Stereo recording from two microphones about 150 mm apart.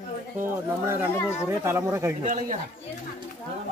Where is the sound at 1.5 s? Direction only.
15° right (ahead or behind).